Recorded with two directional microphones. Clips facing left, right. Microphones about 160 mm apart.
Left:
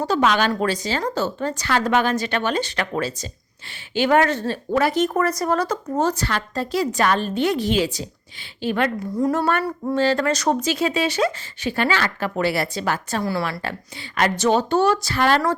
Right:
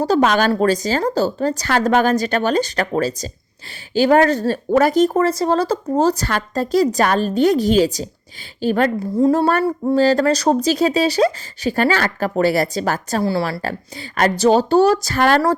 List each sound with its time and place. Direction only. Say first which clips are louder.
0.0 s speech: right 4 dB; 40° right (ahead or behind)
9.1 s speech: right 6 dB; 30° right (ahead or behind); by 15.4 s 45° right (ahead or behind)